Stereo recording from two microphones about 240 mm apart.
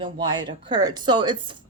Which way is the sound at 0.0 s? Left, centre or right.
Centre.